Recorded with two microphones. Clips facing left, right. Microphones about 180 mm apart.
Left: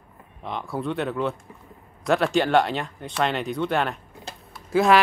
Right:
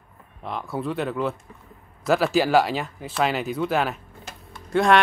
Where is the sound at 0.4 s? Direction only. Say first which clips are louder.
Even; centre (ahead or behind).